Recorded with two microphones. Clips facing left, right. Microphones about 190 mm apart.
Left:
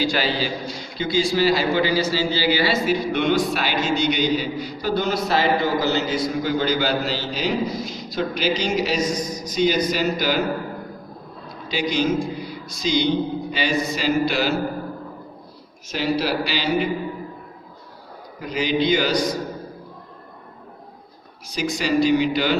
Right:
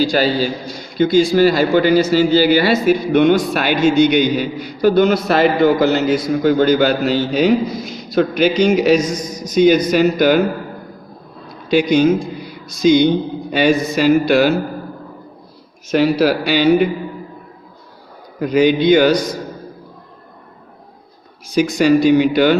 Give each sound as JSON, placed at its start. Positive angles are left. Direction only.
{"t": 0.0, "sound": "a man's voice", "side_deg": -40}
{"t": 11.7, "sound": "a man's voice", "side_deg": -55}
{"t": 15.9, "sound": "a man's voice", "side_deg": -60}
{"t": 18.5, "sound": "a man's voice", "side_deg": -55}
{"t": 21.5, "sound": "a man's voice", "side_deg": -55}